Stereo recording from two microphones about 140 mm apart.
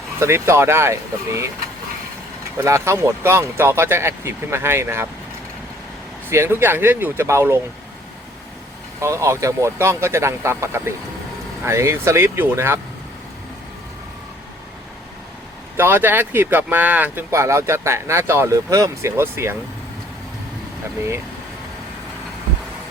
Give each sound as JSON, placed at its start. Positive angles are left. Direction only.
{"t": 0.2, "sound": "speech", "side_deg": -20}
{"t": 2.6, "sound": "speech", "side_deg": -20}
{"t": 6.3, "sound": "speech", "side_deg": -15}
{"t": 9.0, "sound": "speech", "side_deg": -20}
{"t": 15.8, "sound": "speech", "side_deg": -15}